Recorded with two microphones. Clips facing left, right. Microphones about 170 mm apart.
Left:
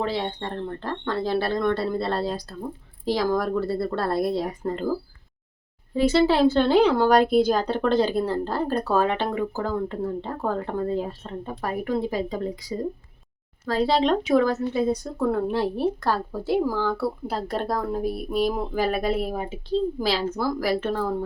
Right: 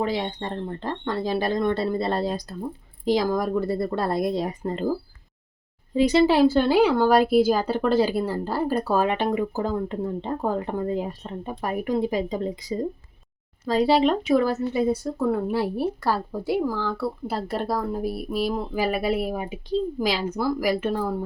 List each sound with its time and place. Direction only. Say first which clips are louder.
0.0 s speech: right 1 dB; 15° right (ahead or behind)
5.9 s speech: right 1 dB; 15° right (ahead or behind)
16.6 s speech: left 4 dB; 5° left (ahead or behind)